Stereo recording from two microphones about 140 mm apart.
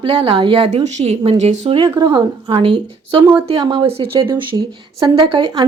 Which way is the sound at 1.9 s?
30° right (ahead or behind).